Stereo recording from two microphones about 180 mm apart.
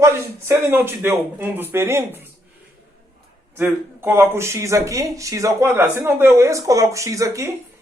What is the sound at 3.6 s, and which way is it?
Speech, 10° right (ahead or behind).